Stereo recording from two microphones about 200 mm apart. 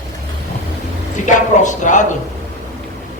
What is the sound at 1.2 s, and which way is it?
Speech, 40° left (ahead or behind).